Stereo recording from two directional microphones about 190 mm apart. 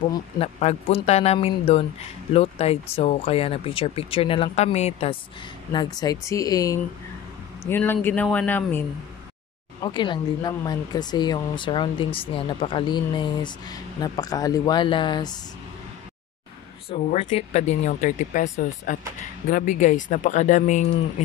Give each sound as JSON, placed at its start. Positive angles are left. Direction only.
{"t": 0.0, "sound": "speech", "side_deg": 30}
{"t": 5.7, "sound": "speech", "side_deg": 20}
{"t": 9.8, "sound": "speech", "side_deg": 25}
{"t": 16.9, "sound": "speech", "side_deg": 35}